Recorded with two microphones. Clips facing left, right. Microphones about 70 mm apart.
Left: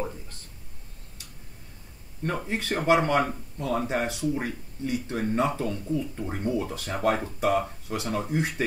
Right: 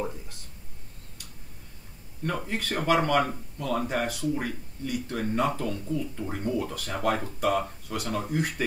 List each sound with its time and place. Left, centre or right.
2.2 s speech: left